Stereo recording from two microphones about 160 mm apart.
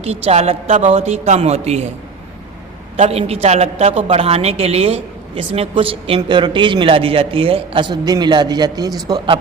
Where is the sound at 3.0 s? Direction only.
40° right (ahead or behind).